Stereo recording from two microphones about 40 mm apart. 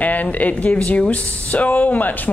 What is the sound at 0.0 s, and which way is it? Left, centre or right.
Speech, left.